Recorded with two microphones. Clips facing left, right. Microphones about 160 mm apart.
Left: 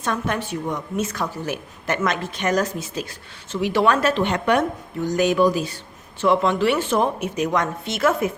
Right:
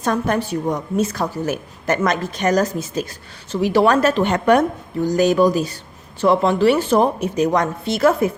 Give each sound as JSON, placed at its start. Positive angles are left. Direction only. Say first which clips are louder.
{"t": 0.0, "sound": "a woman's voice", "louder": "right 5 dB", "side_deg": -40}